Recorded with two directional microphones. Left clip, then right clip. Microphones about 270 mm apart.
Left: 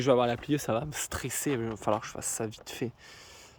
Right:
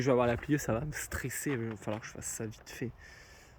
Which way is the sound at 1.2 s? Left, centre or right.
Centre.